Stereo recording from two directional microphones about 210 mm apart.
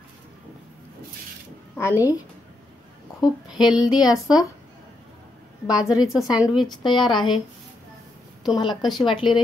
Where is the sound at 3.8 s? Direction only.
20° left (ahead or behind).